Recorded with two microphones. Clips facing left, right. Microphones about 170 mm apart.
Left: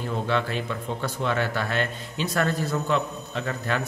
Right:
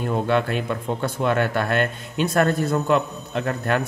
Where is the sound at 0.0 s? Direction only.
55° right (ahead or behind).